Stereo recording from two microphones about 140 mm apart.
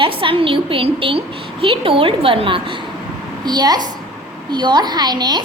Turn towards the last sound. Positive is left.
turn(degrees=-30)  # may be behind; listen again after turning